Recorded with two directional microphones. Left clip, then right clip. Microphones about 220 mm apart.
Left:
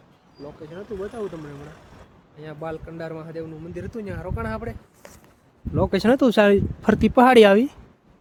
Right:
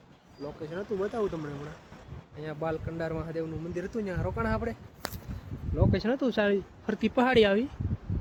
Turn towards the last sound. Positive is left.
turn(degrees=40)  # may be behind; listen again after turning